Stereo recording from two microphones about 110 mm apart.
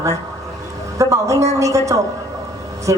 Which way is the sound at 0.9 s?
30° right (ahead or behind).